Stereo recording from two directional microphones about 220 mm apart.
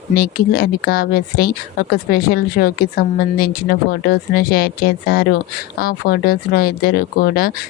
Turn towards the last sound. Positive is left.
turn(degrees=45)  # may be behind; listen again after turning